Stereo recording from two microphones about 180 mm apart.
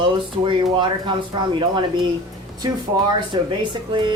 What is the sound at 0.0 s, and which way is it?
Speech, 25° right (ahead or behind).